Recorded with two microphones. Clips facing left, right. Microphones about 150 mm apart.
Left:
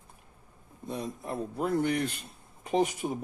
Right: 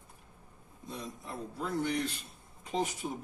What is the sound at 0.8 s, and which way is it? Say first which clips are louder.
Speech: left 7 dB; 55° left (ahead or behind).